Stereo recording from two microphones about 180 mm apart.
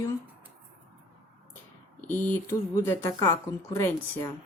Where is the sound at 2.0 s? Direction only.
10° left (ahead or behind).